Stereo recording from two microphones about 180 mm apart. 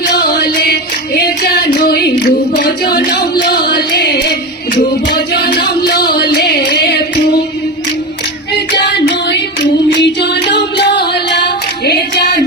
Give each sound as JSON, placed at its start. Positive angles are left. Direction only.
{"t": 0.0, "sound": "music", "side_deg": 60}
{"t": 6.3, "sound": "singing", "side_deg": 65}
{"t": 8.5, "sound": "singing", "side_deg": 70}
{"t": 11.0, "sound": "female singing", "side_deg": 65}